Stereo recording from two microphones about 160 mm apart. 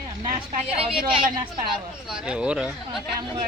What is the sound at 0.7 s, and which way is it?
Speech, 35° right (ahead or behind).